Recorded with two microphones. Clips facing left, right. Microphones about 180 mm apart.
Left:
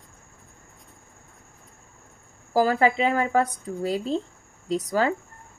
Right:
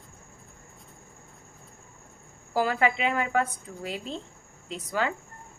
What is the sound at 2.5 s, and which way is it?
A woman's voice, 40° left (ahead or behind).